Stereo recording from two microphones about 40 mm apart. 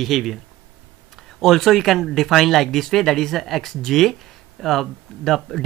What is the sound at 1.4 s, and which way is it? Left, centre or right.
Speech, centre.